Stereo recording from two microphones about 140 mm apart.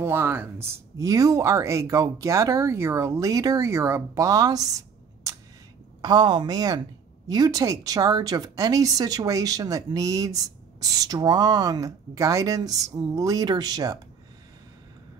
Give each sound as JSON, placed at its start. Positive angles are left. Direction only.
{"t": 0.0, "sound": "a woman's voice", "side_deg": -15}